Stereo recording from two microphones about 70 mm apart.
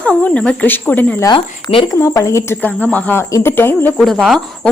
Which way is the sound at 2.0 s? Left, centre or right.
Left.